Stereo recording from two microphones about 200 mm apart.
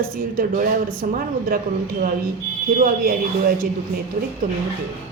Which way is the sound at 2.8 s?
45° right (ahead or behind).